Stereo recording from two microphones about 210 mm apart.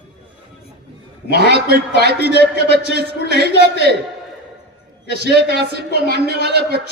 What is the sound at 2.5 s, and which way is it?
Speech, 50° right (ahead or behind).